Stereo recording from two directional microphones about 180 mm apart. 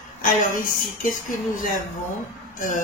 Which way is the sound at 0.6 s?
45° left (ahead or behind).